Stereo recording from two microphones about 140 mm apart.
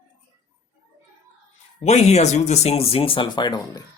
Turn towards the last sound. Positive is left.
turn(degrees=30)  # may be behind; listen again after turning